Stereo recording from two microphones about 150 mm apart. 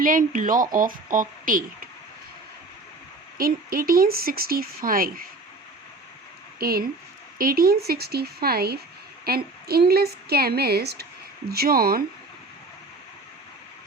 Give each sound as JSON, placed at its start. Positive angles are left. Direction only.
{"t": 0.0, "sound": "speech", "side_deg": -65}
{"t": 3.3, "sound": "speech", "side_deg": -75}
{"t": 6.6, "sound": "a woman's voice", "side_deg": -90}
{"t": 7.3, "sound": "a woman's voice", "side_deg": -75}